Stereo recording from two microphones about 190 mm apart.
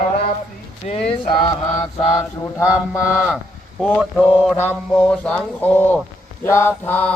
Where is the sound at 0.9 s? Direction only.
30° left (ahead or behind).